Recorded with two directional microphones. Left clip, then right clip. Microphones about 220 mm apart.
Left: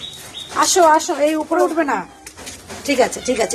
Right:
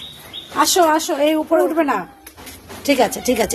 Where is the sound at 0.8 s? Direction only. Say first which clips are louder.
Left 2 dB; 20° right (ahead or behind).